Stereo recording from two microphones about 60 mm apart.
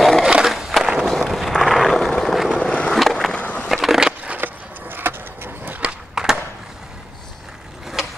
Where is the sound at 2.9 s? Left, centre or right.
Centre.